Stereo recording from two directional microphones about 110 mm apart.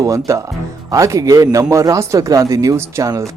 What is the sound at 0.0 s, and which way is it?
Speech, 30° right (ahead or behind).